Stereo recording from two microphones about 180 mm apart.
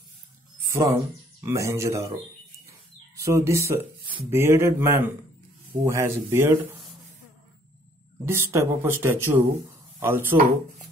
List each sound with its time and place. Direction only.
0.7 s speech: 20° right (ahead or behind)
3.2 s speech: 15° right (ahead or behind)
8.3 s speech: 15° right (ahead or behind)